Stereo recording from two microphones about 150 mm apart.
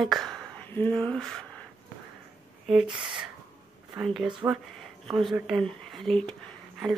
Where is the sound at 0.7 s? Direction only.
15° left (ahead or behind).